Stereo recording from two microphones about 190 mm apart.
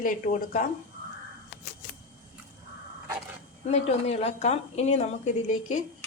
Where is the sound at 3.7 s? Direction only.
35° left (ahead or behind).